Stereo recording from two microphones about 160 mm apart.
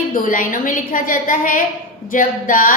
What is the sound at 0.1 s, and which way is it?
A woman's voice, 60° left (ahead or behind).